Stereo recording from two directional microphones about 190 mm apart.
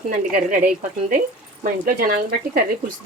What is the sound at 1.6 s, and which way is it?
Speech, 45° right (ahead or behind).